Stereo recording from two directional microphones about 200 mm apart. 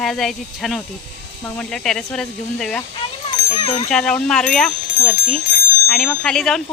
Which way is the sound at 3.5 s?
25° left (ahead or behind).